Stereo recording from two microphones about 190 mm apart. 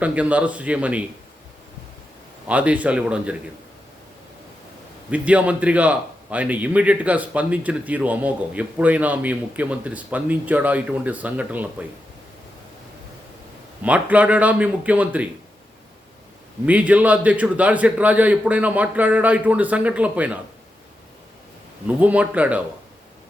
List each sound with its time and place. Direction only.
0.0 s a man's voice: 5° right (ahead or behind)
2.5 s a man's voice: 5° right (ahead or behind)
5.1 s a man's voice: 5° right (ahead or behind)
13.8 s a man's voice: 5° right (ahead or behind)
16.6 s a man's voice: 5° right (ahead or behind)
21.8 s a man's voice: 10° right (ahead or behind)